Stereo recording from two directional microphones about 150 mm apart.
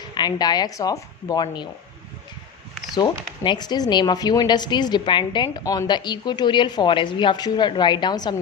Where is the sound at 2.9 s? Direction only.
30° left (ahead or behind).